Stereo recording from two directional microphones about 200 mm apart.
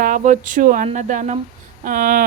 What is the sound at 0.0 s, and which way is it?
A woman's voice, 40° right (ahead or behind).